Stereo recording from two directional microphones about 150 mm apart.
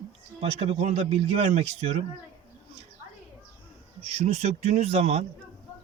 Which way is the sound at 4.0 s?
45° right (ahead or behind).